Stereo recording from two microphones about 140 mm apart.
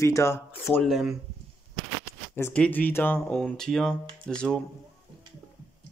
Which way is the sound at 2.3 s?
15° left (ahead or behind).